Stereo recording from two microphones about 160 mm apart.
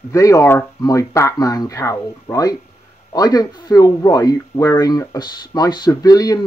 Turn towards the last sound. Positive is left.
turn(degrees=25)  # may be behind; listen again after turning